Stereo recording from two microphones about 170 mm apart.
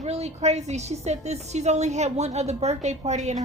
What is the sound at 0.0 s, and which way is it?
A woman's voice, 40° right (ahead or behind).